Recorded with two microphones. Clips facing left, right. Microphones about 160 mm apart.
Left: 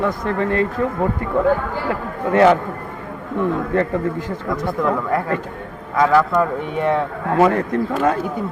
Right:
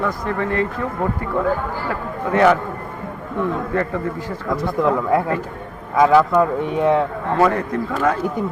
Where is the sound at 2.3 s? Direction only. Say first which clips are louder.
Left 2 dB; 20° left (ahead or behind).